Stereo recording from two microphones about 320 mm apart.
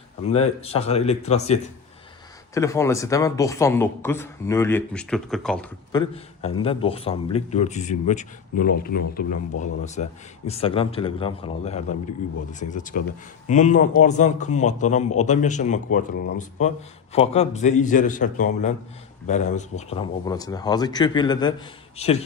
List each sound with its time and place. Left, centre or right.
0.6 s speech: centre
2.6 s speech: centre
5.9 s speech: centre